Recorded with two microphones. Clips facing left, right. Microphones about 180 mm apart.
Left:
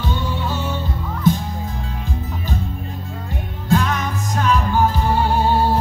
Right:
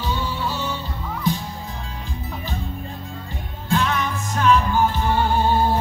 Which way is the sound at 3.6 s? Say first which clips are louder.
Left 3 dB; 40° left (ahead or behind).